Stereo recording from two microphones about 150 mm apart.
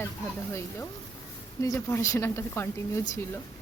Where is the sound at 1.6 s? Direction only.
20° left (ahead or behind).